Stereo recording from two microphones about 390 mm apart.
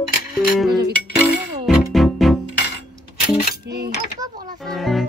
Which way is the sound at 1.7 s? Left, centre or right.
Centre.